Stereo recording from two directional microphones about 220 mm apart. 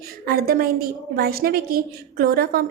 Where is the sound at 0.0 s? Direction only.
45° right (ahead or behind).